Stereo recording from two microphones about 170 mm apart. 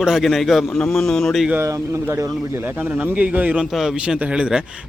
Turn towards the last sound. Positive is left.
turn(degrees=-5)  # may be behind; listen again after turning